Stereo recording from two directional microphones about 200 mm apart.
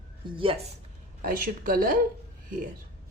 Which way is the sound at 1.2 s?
45° right (ahead or behind).